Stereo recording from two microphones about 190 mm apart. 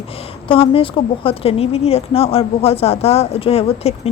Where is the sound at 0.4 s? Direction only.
30° left (ahead or behind).